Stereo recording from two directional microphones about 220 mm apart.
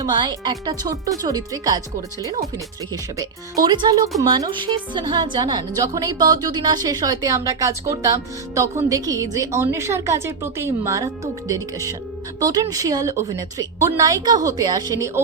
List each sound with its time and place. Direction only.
0.0 s a woman's voice: 20° right (ahead or behind)
2.9 s a woman's voice: 15° right (ahead or behind)